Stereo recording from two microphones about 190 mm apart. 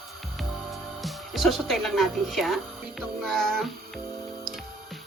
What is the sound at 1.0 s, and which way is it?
A woman's voice, centre (ahead or behind).